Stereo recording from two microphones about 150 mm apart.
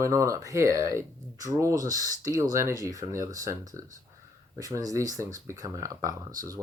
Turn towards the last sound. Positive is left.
turn(degrees=-25)  # may be behind; listen again after turning